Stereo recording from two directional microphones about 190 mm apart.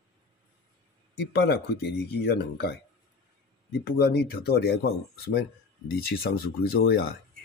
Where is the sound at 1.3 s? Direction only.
60° left (ahead or behind).